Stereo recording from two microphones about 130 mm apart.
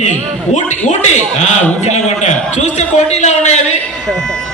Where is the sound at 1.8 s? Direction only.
60° left (ahead or behind).